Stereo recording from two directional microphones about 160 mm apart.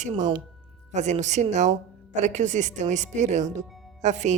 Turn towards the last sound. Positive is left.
turn(degrees=-45)  # may be behind; listen again after turning